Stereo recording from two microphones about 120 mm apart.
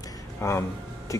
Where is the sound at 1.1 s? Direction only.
25° left (ahead or behind).